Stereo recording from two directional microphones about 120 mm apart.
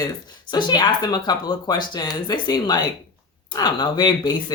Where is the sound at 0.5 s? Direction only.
35° left (ahead or behind).